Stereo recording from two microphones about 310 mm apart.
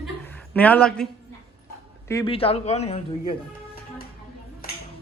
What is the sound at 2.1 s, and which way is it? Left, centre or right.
Speech, centre.